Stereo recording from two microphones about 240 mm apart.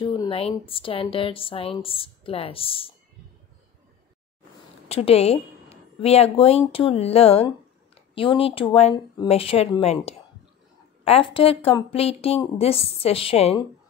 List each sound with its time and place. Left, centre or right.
0.0 s speech: left
4.8 s a woman's voice: left